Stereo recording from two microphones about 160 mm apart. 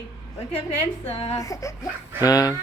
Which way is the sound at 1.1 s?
35° left (ahead or behind).